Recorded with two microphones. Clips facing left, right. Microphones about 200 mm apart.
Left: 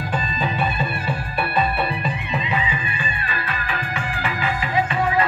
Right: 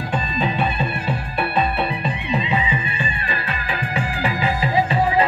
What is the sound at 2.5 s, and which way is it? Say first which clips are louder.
Music: right 2 dB; 25° right (ahead or behind).